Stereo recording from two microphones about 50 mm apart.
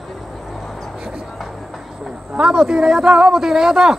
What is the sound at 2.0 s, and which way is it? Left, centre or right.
A man's voice, centre.